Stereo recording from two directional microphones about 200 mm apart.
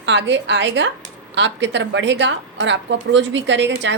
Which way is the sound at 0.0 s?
65° right (ahead or behind).